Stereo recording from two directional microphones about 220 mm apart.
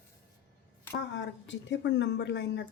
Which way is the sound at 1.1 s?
55° left (ahead or behind).